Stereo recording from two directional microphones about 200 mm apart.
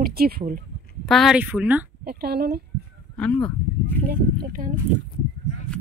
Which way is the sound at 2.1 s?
50° right (ahead or behind).